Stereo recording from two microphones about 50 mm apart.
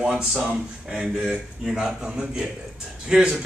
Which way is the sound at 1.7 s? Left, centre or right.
Centre.